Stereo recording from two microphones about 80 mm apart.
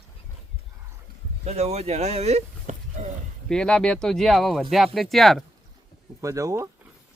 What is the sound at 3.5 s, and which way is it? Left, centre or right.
Speech, centre.